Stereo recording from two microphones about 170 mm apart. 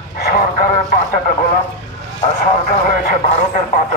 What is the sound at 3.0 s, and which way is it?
Speech, 50° left (ahead or behind).